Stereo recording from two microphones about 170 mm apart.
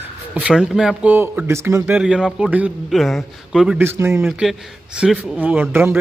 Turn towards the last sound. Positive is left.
turn(degrees=-10)  # may be behind; listen again after turning